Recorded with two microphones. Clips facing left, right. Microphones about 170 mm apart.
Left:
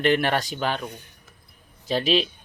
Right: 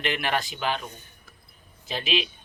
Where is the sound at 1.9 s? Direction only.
40° left (ahead or behind).